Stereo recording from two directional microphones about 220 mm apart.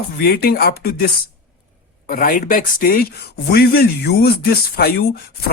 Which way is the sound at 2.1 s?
40° left (ahead or behind).